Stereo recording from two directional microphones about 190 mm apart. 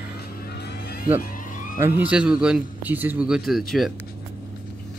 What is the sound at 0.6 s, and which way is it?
Music, 60° left (ahead or behind).